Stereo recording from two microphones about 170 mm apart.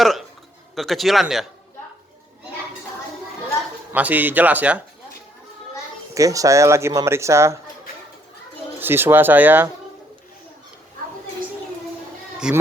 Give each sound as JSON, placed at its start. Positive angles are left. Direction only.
{"t": 0.0, "sound": "a sound", "side_deg": 0}
{"t": 0.8, "sound": "speech", "side_deg": 0}
{"t": 3.9, "sound": "speech", "side_deg": -10}
{"t": 6.1, "sound": "speech", "side_deg": -20}
{"t": 8.8, "sound": "speech", "side_deg": -15}
{"t": 12.4, "sound": "speech", "side_deg": -5}